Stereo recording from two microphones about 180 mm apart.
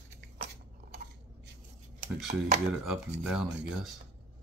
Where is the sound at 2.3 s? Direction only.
40° right (ahead or behind).